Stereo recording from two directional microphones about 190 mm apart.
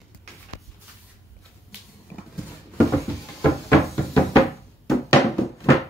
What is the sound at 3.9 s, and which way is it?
Knock, 15° left (ahead or behind).